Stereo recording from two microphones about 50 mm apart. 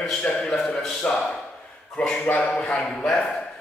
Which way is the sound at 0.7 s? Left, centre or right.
Centre.